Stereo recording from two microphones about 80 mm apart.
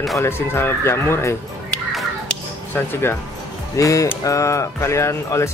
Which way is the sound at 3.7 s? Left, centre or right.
Left.